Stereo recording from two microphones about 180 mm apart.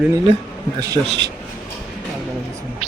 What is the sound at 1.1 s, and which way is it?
Speech, 75° right (ahead or behind).